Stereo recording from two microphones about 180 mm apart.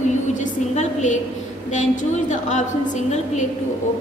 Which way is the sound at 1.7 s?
40° left (ahead or behind).